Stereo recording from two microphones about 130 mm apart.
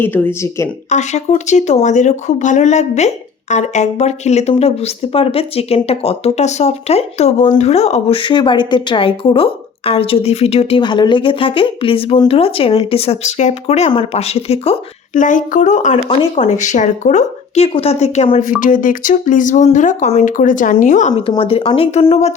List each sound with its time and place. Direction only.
0.0 s speech: 15° left (ahead or behind)
0.9 s a woman's voice: 60° left (ahead or behind)
10.8 s a woman's voice: 35° left (ahead or behind); by 14.8 s 50° left (ahead or behind)
15.1 s speech: 80° left
16.0 s a woman's voice: 45° left (ahead or behind)
16.5 s a woman's voice: 65° left (ahead or behind); by 21.1 s 85° left
21.2 s a woman's voice: 45° left (ahead or behind)